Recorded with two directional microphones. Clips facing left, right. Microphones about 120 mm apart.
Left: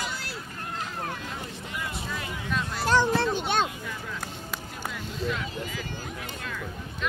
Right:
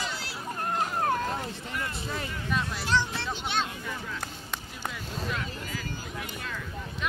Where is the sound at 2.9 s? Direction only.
50° left (ahead or behind).